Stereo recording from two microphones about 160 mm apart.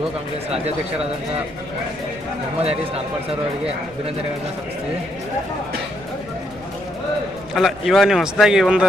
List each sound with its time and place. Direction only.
2.6 s speech: 40° right (ahead or behind)
7.5 s a man's voice: centre (ahead or behind)